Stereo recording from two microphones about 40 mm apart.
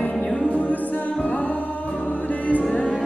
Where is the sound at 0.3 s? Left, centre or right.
Left.